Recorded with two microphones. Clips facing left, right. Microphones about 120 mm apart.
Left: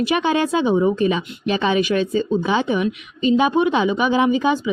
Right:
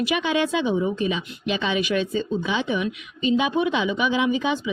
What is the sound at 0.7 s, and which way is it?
Speech, 50° left (ahead or behind).